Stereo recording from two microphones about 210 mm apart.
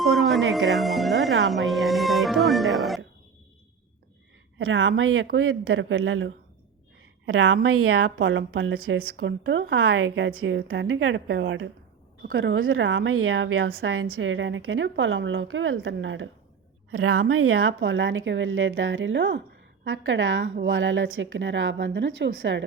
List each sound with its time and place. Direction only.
0.0 s music: centre (ahead or behind)
1.5 s speech: centre (ahead or behind)
4.5 s a woman's voice: 70° right (ahead or behind)
8.2 s a woman's voice: 65° right (ahead or behind)
9.0 s a woman's voice: 50° right (ahead or behind)
12.4 s a woman's voice: 70° right (ahead or behind)
13.8 s a woman's voice: 85° right; by 16.3 s 65° right (ahead or behind)
16.9 s a woman's voice: 90° right; by 19.4 s 60° right (ahead or behind)
19.8 s a woman's voice: 75° right (ahead or behind)